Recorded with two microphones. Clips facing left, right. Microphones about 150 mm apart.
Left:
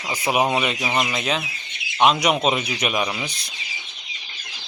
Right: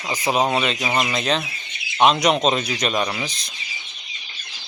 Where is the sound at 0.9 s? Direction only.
5° right (ahead or behind).